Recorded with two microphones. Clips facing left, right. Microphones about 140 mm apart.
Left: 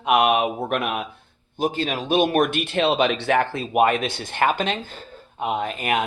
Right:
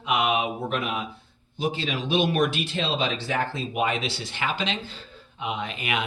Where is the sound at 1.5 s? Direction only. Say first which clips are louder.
Left 4 dB; 50° left (ahead or behind).